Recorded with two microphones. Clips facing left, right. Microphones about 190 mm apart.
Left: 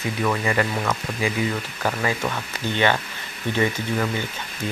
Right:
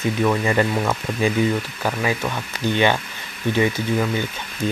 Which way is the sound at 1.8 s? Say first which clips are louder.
Right 1 dB; 5° right (ahead or behind).